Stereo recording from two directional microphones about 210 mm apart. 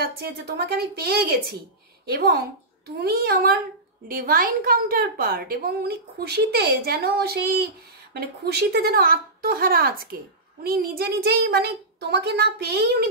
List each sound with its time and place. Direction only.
0.0 s a woman's voice: 50° right (ahead or behind)